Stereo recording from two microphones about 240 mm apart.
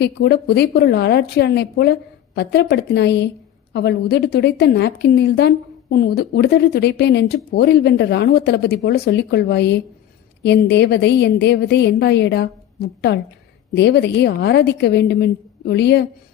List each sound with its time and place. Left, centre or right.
0.0 s a woman's voice: left